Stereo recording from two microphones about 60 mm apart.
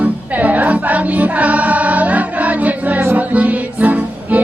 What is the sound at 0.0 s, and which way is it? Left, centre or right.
Music, right.